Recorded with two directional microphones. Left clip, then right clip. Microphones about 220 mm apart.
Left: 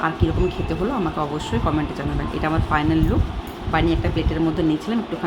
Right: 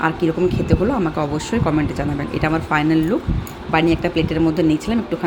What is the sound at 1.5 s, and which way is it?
Speech, 15° right (ahead or behind).